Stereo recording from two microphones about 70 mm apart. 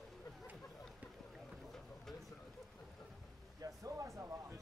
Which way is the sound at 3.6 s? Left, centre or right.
Right.